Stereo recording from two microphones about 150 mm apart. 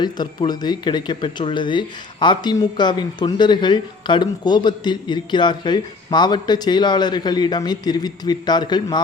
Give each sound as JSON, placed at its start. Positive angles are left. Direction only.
{"t": 0.0, "sound": "speech", "side_deg": 30}